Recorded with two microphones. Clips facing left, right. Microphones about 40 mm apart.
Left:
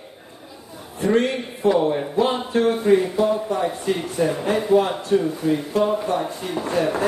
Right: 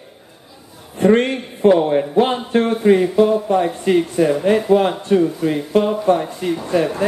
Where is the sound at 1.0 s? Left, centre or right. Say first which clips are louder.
Right 5 dB; right.